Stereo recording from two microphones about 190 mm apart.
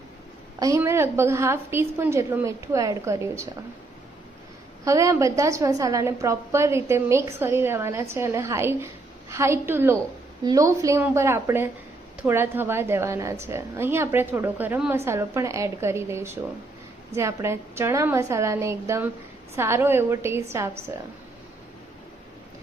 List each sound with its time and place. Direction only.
0.6 s a woman's voice: 15° right (ahead or behind)
4.9 s a woman's voice: 15° right (ahead or behind)